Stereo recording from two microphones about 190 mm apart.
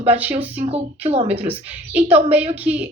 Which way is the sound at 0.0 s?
10° right (ahead or behind).